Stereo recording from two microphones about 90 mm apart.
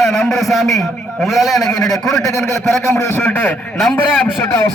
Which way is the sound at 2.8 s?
35° left (ahead or behind).